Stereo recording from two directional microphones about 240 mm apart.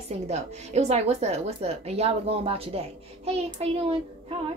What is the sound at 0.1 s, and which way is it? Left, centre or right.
A woman's voice, right.